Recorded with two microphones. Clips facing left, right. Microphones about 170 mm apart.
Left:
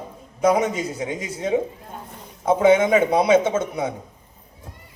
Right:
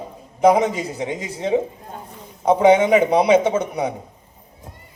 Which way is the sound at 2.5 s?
20° right (ahead or behind).